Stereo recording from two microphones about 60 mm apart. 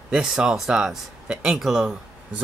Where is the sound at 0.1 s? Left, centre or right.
Centre.